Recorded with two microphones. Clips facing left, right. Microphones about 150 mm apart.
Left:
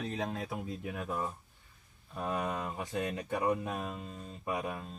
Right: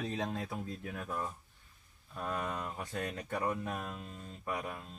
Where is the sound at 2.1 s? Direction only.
20° left (ahead or behind).